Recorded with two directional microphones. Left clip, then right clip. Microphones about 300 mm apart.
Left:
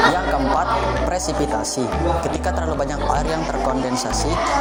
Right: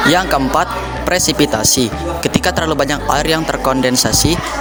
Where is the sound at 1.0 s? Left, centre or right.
Right.